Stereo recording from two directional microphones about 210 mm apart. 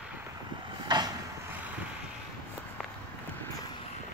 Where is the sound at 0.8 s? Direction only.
20° right (ahead or behind).